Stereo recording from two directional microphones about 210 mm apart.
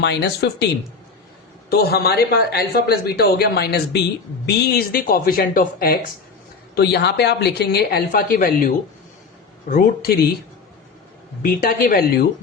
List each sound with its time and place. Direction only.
0.0 s speech: 55° left (ahead or behind)
1.7 s speech: 50° left (ahead or behind)
11.4 s speech: 40° left (ahead or behind)